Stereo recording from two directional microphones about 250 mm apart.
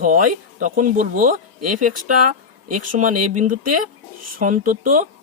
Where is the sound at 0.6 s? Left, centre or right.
Right.